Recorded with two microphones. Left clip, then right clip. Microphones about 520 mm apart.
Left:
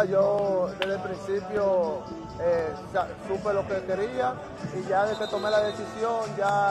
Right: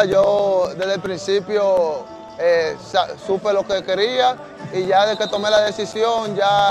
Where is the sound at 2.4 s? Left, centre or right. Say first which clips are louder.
Right 9 dB; right.